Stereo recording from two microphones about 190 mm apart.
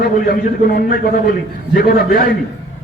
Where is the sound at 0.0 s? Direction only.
50° left (ahead or behind).